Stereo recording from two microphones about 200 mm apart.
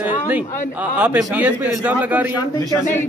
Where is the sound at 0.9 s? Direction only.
5° right (ahead or behind).